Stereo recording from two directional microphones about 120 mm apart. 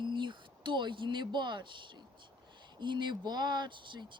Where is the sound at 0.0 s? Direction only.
40° right (ahead or behind).